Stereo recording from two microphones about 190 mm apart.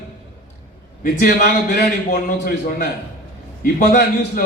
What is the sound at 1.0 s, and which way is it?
A man's voice, 55° left (ahead or behind).